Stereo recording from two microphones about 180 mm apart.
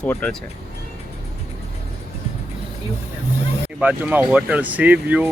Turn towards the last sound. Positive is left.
turn(degrees=-10)  # may be behind; listen again after turning